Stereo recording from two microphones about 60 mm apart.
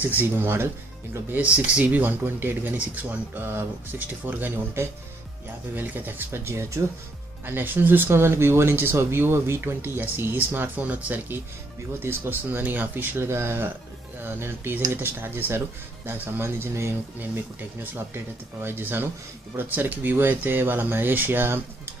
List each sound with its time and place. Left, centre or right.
0.0 s speech: right
1.3 s speech: right
4.8 s speech: right
5.8 s speech: right
7.4 s speech: right
12.0 s speech: right
17.9 s speech: right